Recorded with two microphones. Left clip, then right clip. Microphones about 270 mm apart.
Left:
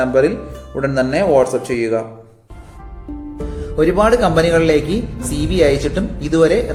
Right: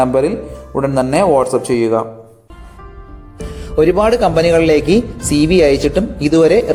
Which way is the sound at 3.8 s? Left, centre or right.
Right.